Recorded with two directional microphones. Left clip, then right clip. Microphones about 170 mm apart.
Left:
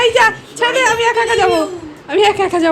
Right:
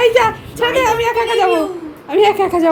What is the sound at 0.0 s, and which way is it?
A woman's voice, centre (ahead or behind).